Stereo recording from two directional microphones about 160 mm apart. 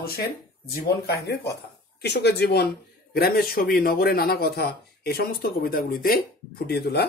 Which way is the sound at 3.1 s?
65° left (ahead or behind).